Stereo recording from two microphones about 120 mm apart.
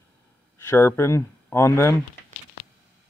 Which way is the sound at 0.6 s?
20° left (ahead or behind).